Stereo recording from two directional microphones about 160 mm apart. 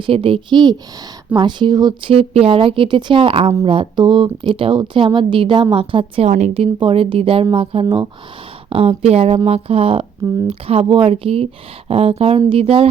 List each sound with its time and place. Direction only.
0.0 s speech: 35° right (ahead or behind)